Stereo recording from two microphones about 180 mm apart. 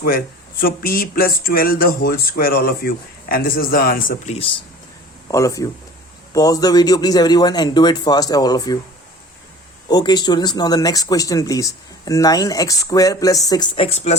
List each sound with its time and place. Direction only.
0.6 s a sound: 55° left (ahead or behind)
4.4 s speech: 30° left (ahead or behind)
5.3 s speech: 15° left (ahead or behind)
9.9 s speech: 25° left (ahead or behind)